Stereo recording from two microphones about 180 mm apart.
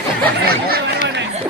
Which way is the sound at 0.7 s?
60° right (ahead or behind).